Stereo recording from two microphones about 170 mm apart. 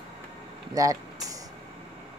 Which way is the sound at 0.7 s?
20° right (ahead or behind).